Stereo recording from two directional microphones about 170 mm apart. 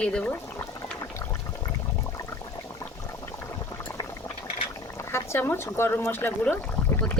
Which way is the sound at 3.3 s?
15° left (ahead or behind).